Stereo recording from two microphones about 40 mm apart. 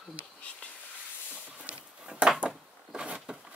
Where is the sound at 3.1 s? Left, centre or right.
Right.